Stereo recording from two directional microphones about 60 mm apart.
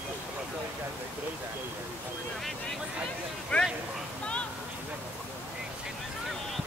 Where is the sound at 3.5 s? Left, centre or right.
Left.